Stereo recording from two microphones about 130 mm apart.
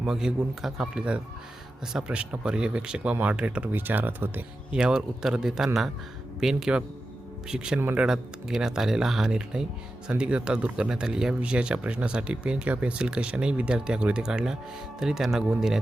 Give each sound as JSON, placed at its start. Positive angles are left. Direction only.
{"t": 0.0, "sound": "speech", "side_deg": -5}
{"t": 8.0, "sound": "speech", "side_deg": -5}